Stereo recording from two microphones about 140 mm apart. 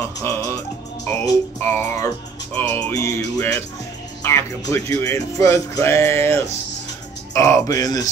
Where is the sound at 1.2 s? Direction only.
15° left (ahead or behind).